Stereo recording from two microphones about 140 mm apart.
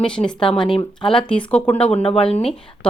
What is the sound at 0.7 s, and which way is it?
Speech, 35° left (ahead or behind).